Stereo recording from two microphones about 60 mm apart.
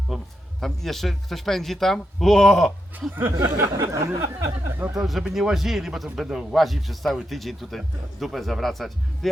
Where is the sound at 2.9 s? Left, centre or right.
Right.